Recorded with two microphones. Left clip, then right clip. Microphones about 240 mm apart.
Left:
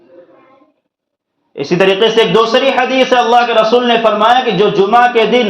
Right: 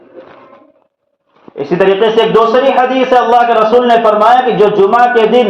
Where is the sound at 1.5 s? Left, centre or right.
Left.